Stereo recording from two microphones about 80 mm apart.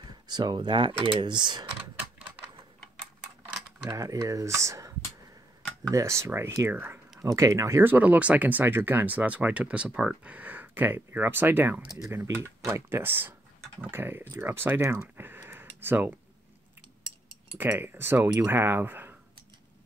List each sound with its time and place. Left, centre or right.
0.1 s speech: right
3.8 s speech: right
7.2 s speech: right
7.8 s speech: right
15.1 s a sound: right
17.6 s speech: right